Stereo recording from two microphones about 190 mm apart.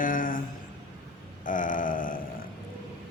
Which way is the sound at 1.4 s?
45° left (ahead or behind).